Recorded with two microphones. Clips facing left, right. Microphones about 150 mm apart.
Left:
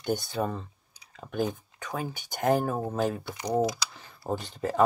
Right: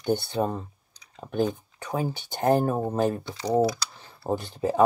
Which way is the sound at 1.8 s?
20° right (ahead or behind).